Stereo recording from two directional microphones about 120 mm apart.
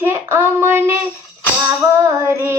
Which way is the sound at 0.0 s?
20° right (ahead or behind).